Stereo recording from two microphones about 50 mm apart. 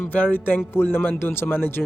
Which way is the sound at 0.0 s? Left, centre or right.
Left.